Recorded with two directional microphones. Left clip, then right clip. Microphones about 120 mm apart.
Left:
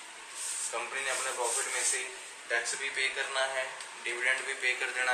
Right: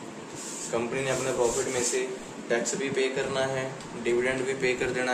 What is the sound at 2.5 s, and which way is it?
Speech, centre (ahead or behind).